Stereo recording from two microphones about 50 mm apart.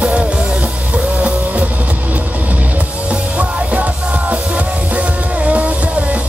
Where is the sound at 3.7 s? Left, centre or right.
Right.